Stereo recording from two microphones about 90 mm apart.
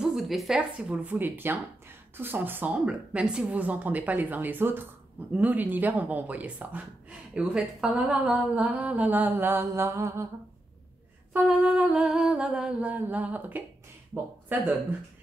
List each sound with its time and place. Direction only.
0.0 s a sound: 5° right (ahead or behind)
0.6 s speech: 10° right (ahead or behind); by 10.2 s 30° right (ahead or behind)
11.3 s humming: 15° right (ahead or behind)
14.5 s speech: 20° right (ahead or behind)